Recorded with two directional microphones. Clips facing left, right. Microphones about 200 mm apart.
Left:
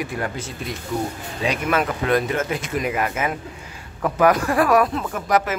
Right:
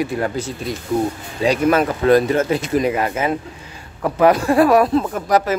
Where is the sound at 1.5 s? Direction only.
35° right (ahead or behind).